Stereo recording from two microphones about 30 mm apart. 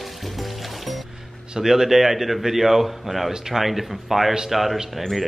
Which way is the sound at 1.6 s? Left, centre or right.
Centre.